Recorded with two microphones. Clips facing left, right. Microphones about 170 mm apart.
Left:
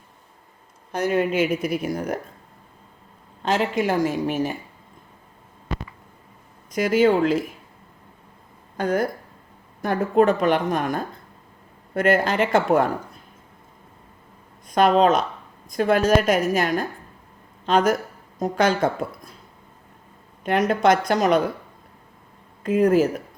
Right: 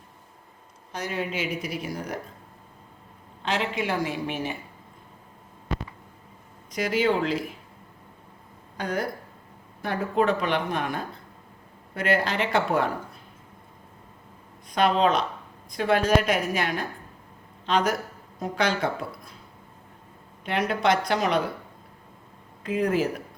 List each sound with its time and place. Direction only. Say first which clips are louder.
0.9 s speech: left 9 dB; 55° left (ahead or behind)
3.4 s speech: left 6 dB; 45° left (ahead or behind)
6.7 s speech: left 6 dB; 50° left (ahead or behind)
8.8 s speech: left 6 dB; 50° left (ahead or behind)
14.7 s speech: left 5 dB; 45° left (ahead or behind)
20.4 s speech: left 6 dB; 45° left (ahead or behind)
22.6 s speech: left 7 dB; 45° left (ahead or behind)